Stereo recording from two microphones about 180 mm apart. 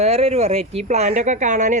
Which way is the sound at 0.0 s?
35° right (ahead or behind).